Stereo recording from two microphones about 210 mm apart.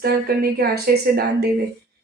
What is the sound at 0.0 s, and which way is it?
A woman's voice, 45° right (ahead or behind).